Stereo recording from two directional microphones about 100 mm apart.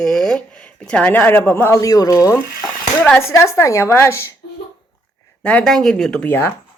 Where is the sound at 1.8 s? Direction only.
35° left (ahead or behind).